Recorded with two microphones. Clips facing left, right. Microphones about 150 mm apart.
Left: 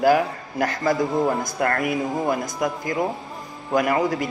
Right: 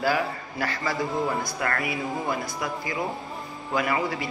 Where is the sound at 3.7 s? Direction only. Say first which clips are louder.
Left 6 dB; 45° left (ahead or behind).